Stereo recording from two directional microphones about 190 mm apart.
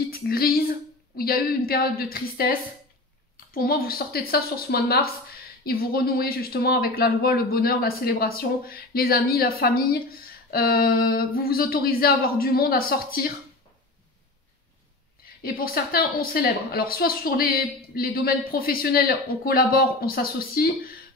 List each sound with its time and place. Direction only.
0.1 s a sound: 50° left (ahead or behind)
1.1 s a woman's voice: 50° left (ahead or behind)
15.4 s a woman's voice: 50° left (ahead or behind)